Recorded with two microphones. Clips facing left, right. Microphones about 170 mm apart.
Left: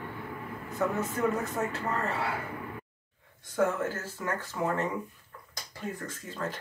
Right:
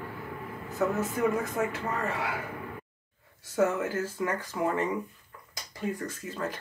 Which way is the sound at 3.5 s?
10° right (ahead or behind).